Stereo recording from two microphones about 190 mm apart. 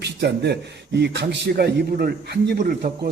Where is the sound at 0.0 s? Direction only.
60° right (ahead or behind).